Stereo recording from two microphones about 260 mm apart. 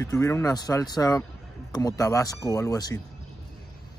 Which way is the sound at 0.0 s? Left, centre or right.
Centre.